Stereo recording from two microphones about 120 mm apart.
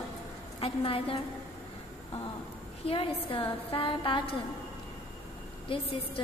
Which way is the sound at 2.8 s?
50° left (ahead or behind).